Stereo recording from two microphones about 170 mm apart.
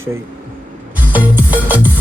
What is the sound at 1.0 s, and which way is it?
Music, 10° right (ahead or behind).